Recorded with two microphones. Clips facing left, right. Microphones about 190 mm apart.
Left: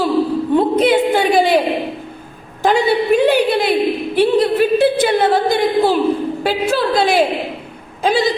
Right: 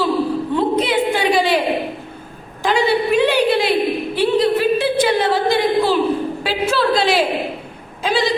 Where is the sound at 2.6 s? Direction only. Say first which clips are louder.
Left 2 dB; 55° left (ahead or behind).